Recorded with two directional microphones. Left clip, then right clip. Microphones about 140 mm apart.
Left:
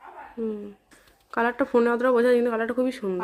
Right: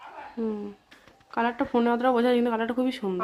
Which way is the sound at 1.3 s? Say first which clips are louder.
Left 3 dB; 25° left (ahead or behind).